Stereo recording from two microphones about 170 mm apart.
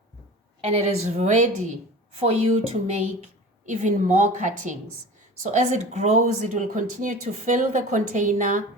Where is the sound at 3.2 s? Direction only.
45° right (ahead or behind).